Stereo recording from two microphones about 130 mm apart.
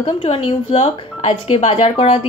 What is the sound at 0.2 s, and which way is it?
A woman's voice, 50° left (ahead or behind).